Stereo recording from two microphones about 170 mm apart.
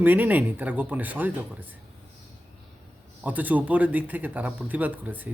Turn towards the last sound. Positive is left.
turn(degrees=-10)  # may be behind; listen again after turning